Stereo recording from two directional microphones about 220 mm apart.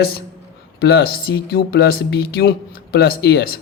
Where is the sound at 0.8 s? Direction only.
45° left (ahead or behind).